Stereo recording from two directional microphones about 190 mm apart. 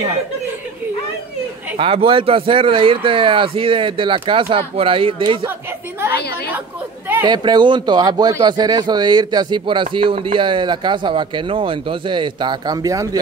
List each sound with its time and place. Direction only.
1.8 s speech: 30° right (ahead or behind)
5.4 s speech: 10° right (ahead or behind)
7.2 s speech: 25° right (ahead or behind)